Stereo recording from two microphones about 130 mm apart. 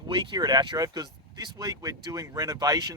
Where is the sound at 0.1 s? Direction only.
35° right (ahead or behind).